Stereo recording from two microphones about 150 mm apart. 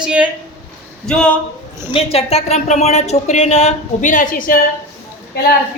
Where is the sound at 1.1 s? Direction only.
5° left (ahead or behind).